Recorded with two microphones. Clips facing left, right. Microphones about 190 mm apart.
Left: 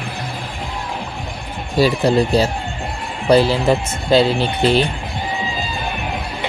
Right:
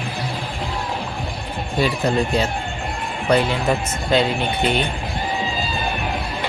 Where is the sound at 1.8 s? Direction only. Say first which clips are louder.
Left 5 dB; 35° left (ahead or behind).